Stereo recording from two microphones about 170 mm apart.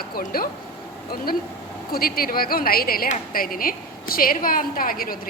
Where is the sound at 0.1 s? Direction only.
60° left (ahead or behind).